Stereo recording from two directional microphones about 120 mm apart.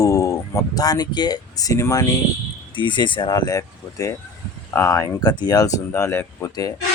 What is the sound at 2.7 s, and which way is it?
Speech, 40° left (ahead or behind).